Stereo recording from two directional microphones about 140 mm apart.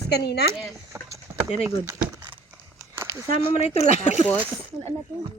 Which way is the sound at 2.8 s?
20° right (ahead or behind).